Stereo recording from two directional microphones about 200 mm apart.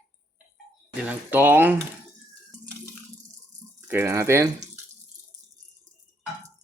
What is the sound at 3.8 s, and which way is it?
Speech, 10° right (ahead or behind).